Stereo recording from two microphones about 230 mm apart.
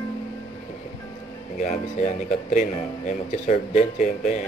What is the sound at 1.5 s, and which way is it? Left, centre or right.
Speech, left.